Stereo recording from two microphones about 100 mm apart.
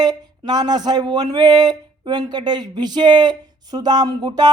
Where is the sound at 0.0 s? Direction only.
45° right (ahead or behind).